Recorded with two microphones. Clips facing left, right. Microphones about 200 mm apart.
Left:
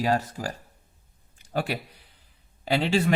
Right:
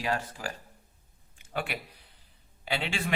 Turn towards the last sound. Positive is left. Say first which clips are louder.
# left 9 dB
turn(degrees=40)  # may be behind; listen again after turning